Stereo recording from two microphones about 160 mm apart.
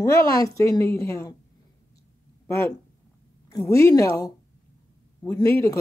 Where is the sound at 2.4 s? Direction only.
15° left (ahead or behind).